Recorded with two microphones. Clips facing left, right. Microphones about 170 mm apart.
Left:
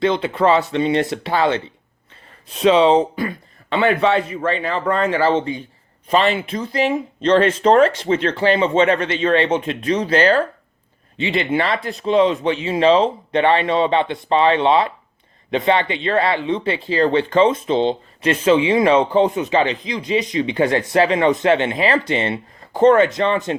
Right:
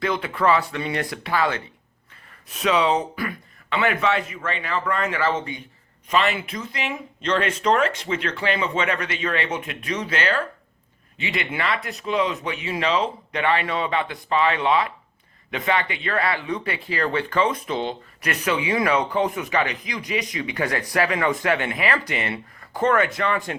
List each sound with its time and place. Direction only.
0.0 s speech: 25° left (ahead or behind)